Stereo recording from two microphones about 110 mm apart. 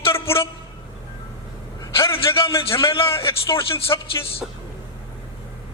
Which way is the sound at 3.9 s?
35° left (ahead or behind).